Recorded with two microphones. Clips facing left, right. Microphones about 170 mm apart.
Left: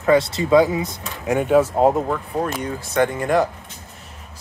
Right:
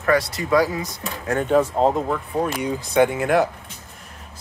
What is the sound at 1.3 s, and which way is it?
Speech, 10° left (ahead or behind).